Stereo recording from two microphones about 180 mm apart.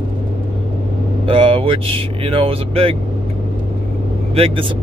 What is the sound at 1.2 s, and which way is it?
Speech, 30° right (ahead or behind).